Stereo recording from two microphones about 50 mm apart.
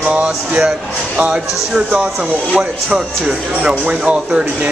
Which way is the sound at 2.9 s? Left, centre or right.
Right.